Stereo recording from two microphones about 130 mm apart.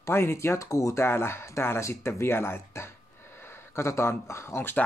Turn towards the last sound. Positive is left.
turn(degrees=15)  # may be behind; listen again after turning